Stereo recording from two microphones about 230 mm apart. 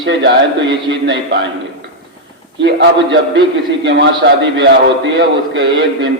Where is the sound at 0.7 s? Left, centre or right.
Right.